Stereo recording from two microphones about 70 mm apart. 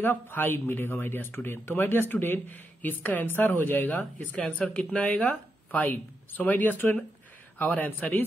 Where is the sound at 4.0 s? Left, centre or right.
Centre.